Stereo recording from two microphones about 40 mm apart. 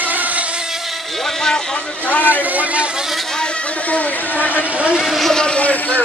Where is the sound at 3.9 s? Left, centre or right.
Left.